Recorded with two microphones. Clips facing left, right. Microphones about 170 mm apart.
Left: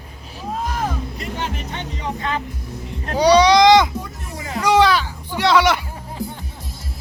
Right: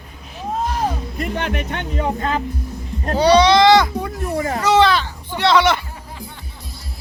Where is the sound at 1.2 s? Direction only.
65° right (ahead or behind).